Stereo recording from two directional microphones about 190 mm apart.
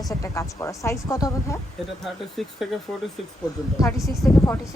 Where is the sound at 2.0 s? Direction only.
Centre (ahead or behind).